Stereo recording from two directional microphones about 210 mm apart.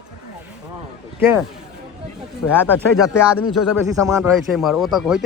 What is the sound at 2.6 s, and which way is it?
Speech, 5° right (ahead or behind).